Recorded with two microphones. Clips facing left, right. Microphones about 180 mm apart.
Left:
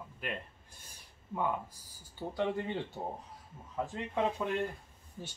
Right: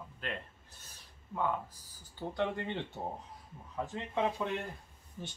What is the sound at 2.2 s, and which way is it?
Speech, 5° left (ahead or behind).